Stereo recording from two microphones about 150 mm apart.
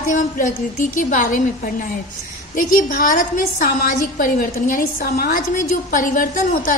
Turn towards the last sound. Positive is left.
turn(degrees=65)  # may be behind; listen again after turning